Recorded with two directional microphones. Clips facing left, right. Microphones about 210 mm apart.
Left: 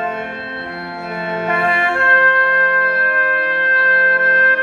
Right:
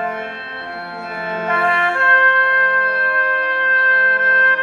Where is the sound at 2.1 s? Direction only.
10° left (ahead or behind).